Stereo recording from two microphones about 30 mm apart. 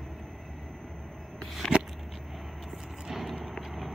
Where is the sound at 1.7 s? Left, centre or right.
Right.